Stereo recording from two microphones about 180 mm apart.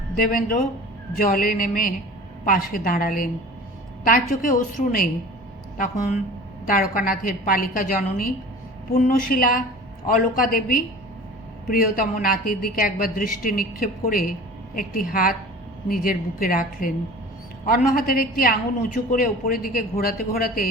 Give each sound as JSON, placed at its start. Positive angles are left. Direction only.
{"t": 0.2, "sound": "a woman's voice", "side_deg": 55}